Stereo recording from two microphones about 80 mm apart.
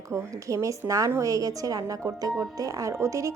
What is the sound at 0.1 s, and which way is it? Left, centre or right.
A woman's voice, right.